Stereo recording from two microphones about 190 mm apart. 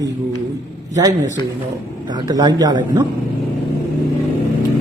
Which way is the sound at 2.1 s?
20° right (ahead or behind).